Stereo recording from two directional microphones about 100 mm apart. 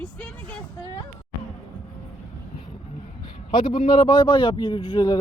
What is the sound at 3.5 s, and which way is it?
Speech, 50° left (ahead or behind).